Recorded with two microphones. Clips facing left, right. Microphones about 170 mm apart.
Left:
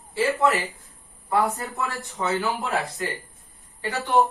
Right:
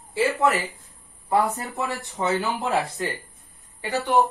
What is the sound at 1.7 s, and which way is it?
Speech, 20° right (ahead or behind).